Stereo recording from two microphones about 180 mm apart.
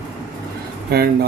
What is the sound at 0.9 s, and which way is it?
Speech, 60° right (ahead or behind).